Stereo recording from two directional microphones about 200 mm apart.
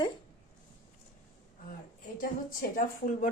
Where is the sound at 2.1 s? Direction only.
45° left (ahead or behind).